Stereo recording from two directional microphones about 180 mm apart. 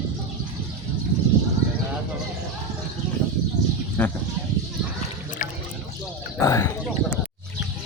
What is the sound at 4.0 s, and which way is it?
Sheep, 10° left (ahead or behind).